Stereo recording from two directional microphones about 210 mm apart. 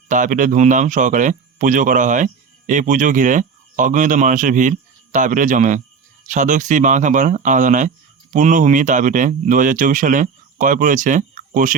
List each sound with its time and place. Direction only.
0.1 s speech: 40° right (ahead or behind)